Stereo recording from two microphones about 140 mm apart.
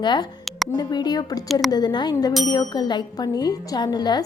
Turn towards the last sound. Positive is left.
turn(degrees=30)  # may be behind; listen again after turning